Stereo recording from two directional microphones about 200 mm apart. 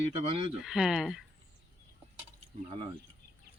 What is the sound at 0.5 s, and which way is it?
Speech, centre (ahead or behind).